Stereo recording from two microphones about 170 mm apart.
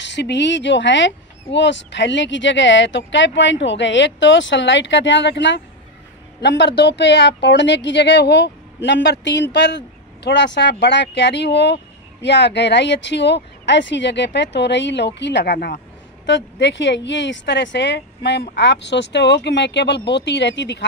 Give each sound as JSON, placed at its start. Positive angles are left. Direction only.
{"t": 0.1, "sound": "speech", "side_deg": 90}
{"t": 16.3, "sound": "speech", "side_deg": 90}